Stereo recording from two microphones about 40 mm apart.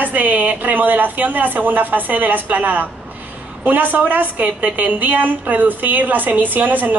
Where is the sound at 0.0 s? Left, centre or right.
Right.